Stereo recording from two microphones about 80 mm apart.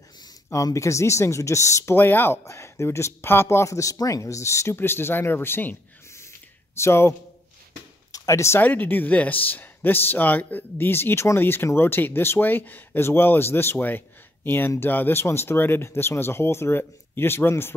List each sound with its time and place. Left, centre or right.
0.7 s speech: left
2.0 s speech: left
8.1 s a sound: left
8.5 s speech: left